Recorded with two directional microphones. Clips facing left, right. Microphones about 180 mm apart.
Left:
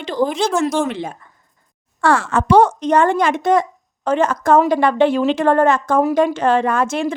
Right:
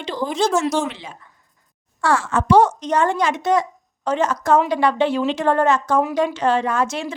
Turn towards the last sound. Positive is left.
turn(degrees=55)  # may be behind; listen again after turning